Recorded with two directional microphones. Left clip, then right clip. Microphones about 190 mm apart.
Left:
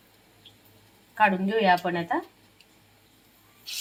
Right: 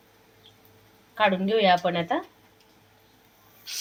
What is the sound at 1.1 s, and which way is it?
Speech, 30° right (ahead or behind).